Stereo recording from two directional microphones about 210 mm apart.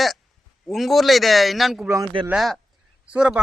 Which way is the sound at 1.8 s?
15° right (ahead or behind).